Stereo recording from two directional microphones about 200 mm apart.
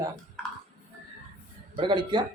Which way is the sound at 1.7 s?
25° right (ahead or behind).